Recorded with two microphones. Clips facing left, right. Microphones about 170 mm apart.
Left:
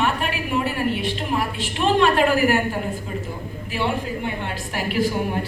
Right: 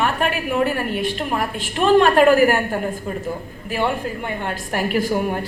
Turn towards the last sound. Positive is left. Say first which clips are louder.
# right 2 dB
turn(degrees=-50)  # may be behind; listen again after turning